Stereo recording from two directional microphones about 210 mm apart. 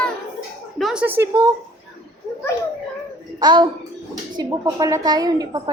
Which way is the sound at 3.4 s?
20° right (ahead or behind).